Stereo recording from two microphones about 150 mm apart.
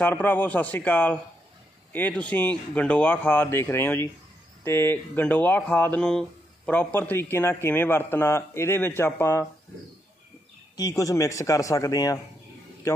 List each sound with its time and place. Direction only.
0.0 s speech: 15° left (ahead or behind)
10.8 s speech: 25° left (ahead or behind)